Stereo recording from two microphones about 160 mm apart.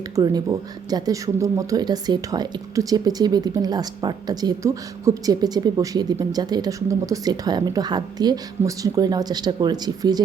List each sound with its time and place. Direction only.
0.2 s speech: 25° right (ahead or behind)